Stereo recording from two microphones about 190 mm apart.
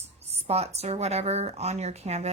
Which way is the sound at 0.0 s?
35° right (ahead or behind).